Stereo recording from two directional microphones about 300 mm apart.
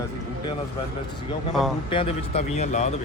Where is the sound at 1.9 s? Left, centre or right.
Centre.